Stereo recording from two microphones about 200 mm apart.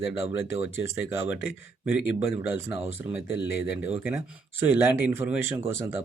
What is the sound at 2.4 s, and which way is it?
Speech, 15° right (ahead or behind).